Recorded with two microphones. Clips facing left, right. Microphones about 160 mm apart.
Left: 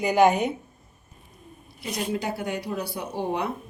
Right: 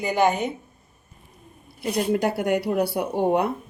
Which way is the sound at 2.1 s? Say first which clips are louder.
Right 7 dB; 60° right (ahead or behind).